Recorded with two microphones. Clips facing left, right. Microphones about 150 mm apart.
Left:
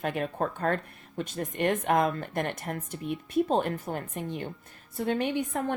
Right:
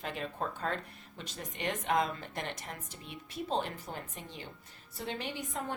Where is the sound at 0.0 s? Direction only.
55° left (ahead or behind).